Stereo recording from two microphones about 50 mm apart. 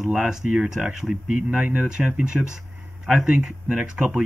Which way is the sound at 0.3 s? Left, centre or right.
Centre.